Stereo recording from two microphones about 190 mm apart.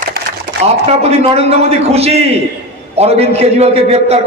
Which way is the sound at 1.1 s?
35° right (ahead or behind).